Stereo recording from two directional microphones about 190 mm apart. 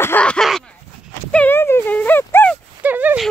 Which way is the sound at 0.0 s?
10° left (ahead or behind).